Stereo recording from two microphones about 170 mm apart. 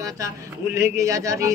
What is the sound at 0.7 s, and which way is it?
Music, 15° right (ahead or behind).